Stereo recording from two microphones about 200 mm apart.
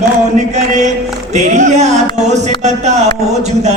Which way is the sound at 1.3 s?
35° right (ahead or behind).